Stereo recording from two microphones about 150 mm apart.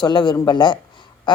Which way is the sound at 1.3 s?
30° left (ahead or behind).